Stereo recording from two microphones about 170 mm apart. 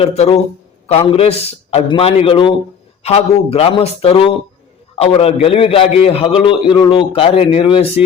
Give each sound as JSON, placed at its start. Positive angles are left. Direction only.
{"t": 0.0, "sound": "a man's voice", "side_deg": 35}